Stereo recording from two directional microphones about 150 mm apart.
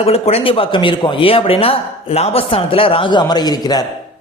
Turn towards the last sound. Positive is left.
turn(degrees=25)  # may be behind; listen again after turning